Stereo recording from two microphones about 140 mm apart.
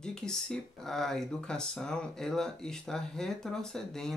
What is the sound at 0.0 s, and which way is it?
Speech, 5° left (ahead or behind).